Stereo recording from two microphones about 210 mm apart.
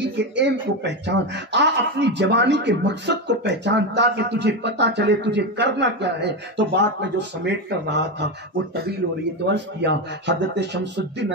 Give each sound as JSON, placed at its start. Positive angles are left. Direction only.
{"t": 0.0, "sound": "speech", "side_deg": -55}
{"t": 9.5, "sound": "speech", "side_deg": -55}